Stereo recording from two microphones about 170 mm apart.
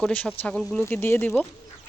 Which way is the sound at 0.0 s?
10° left (ahead or behind).